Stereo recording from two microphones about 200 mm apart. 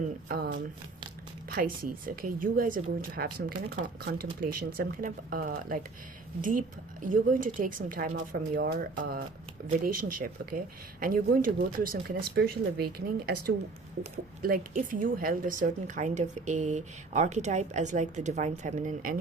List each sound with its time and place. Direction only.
0.3 s speech: 50° right (ahead or behind)
7.0 s speech: 40° right (ahead or behind)